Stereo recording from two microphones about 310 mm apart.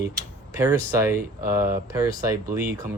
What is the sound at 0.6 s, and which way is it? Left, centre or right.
Speech, centre.